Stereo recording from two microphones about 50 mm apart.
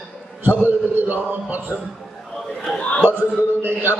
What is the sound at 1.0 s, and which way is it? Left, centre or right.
Speech, right.